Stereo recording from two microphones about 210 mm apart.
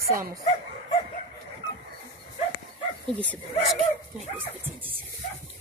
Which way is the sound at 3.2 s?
5° left (ahead or behind).